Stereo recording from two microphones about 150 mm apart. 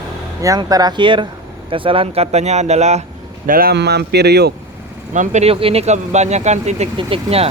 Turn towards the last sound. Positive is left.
turn(degrees=-40)  # may be behind; listen again after turning